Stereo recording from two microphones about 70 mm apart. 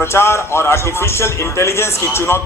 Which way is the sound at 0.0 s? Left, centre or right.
Left.